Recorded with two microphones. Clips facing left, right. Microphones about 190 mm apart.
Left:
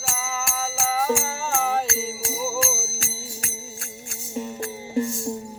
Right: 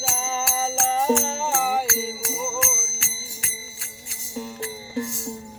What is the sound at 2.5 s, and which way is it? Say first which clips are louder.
Music: left 3 dB; 35° left (ahead or behind).